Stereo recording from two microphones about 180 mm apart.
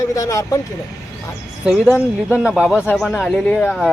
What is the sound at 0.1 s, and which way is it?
Speech, 20° left (ahead or behind).